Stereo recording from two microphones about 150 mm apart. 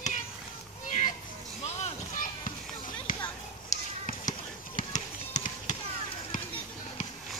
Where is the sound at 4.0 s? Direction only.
60° left (ahead or behind).